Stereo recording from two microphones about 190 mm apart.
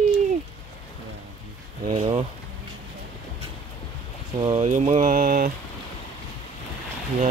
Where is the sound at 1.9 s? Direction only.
30° right (ahead or behind).